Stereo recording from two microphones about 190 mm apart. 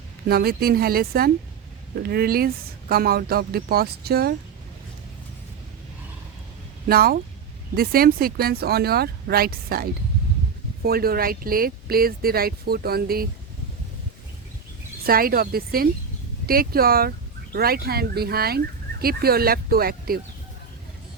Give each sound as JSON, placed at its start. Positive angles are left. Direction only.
{"t": 0.3, "sound": "speech", "side_deg": -55}
{"t": 6.8, "sound": "speech", "side_deg": -55}
{"t": 15.0, "sound": "speech", "side_deg": -50}